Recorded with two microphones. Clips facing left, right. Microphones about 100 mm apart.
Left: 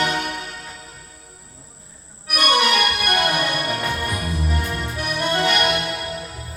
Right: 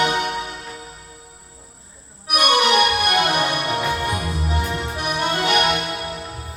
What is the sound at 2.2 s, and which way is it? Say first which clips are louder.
Organ: right 1 dB; 50° left (ahead or behind).